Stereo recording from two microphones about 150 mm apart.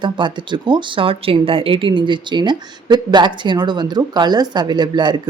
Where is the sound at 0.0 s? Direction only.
30° right (ahead or behind).